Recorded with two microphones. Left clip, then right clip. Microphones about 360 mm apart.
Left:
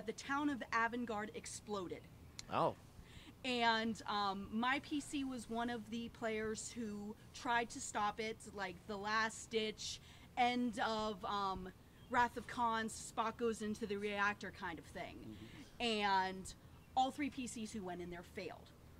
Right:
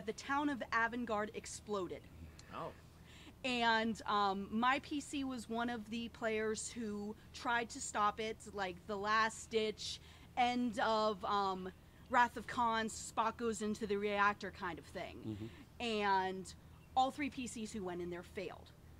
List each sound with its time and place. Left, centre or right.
0.0 s speech: right
2.3 s a sound: left
3.4 s a woman's voice: right